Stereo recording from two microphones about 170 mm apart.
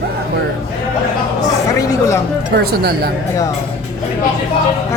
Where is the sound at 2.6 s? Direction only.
65° right (ahead or behind).